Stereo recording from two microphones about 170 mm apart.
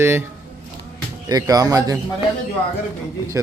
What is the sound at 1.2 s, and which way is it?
Speech, 20° right (ahead or behind).